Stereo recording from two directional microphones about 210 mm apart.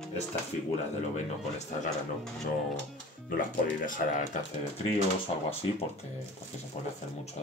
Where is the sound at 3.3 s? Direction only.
40° left (ahead or behind).